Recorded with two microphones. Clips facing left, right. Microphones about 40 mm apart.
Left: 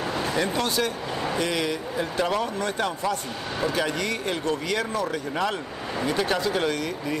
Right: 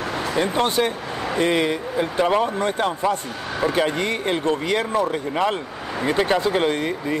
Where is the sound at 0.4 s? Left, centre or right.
Right.